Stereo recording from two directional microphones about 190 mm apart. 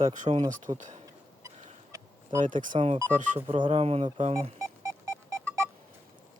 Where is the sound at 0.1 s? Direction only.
35° right (ahead or behind).